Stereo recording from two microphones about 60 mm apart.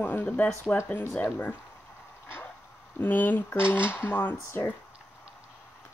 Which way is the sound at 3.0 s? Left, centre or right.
Left.